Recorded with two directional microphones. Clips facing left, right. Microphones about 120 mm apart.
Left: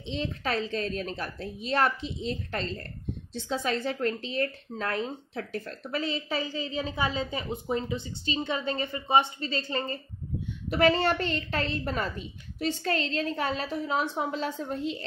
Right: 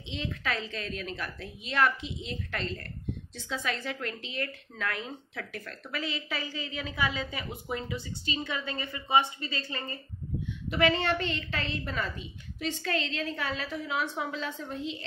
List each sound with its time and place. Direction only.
0.0 s speech: 35° left (ahead or behind)
14.6 s speech: 40° left (ahead or behind)